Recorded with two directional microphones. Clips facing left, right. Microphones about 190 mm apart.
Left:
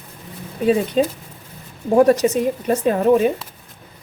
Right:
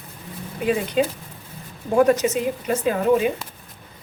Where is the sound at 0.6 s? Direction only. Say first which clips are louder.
Left 4 dB; 35° left (ahead or behind).